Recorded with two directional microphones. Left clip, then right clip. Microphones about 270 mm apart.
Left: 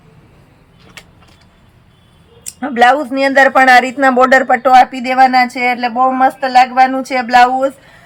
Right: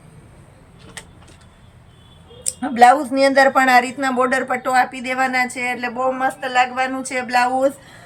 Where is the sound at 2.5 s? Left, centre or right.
Centre.